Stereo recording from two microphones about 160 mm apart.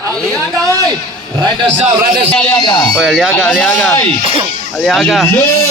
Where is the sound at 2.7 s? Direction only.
25° left (ahead or behind).